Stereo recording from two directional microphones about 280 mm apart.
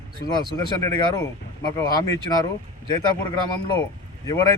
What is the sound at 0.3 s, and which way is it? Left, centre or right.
Speech, centre.